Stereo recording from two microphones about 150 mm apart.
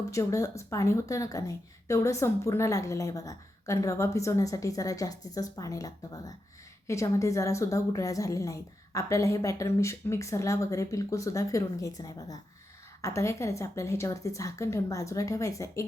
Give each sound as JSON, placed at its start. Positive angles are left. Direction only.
{"t": 0.1, "sound": "speech", "side_deg": 20}